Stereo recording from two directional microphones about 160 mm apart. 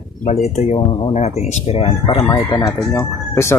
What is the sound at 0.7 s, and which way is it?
Speech, 30° left (ahead or behind).